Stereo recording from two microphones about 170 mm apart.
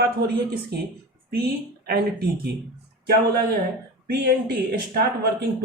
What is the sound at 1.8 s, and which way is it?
Speech, 65° right (ahead or behind).